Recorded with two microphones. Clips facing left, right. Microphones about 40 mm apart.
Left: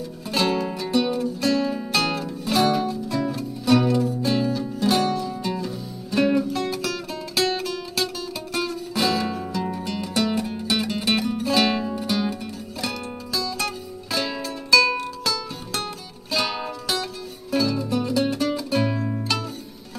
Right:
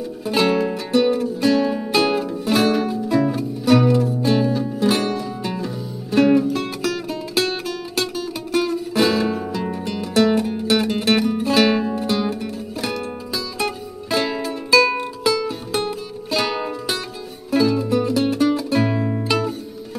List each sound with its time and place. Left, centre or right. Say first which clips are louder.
0.3 s music: right 5 dB; centre
18.9 s music: right 4 dB; right